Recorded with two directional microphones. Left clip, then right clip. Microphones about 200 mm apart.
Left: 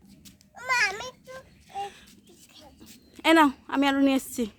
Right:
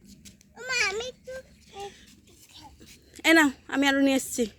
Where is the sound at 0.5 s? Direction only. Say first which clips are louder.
Left 2 dB; 25° left (ahead or behind).